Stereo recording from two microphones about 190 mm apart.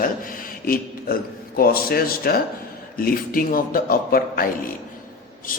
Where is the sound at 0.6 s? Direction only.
50° left (ahead or behind).